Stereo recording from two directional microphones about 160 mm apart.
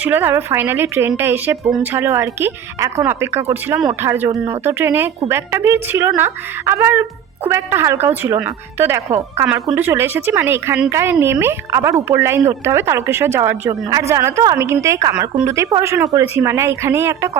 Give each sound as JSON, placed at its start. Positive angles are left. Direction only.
{"t": 0.0, "sound": "speech", "side_deg": -10}
{"t": 9.0, "sound": "speech", "side_deg": -40}
{"t": 9.7, "sound": "speech", "side_deg": -15}